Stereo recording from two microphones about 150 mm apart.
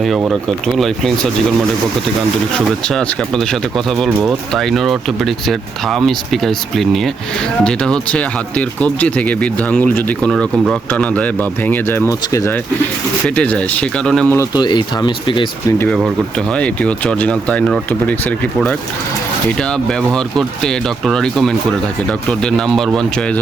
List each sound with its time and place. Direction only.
0.2 s speech: 5° right (ahead or behind)
2.8 s speech: 5° left (ahead or behind); by 12.5 s 20° left (ahead or behind)
13.2 s speech: 10° left (ahead or behind)
14.3 s speech: 30° left (ahead or behind)
16.5 s speech: 10° left (ahead or behind)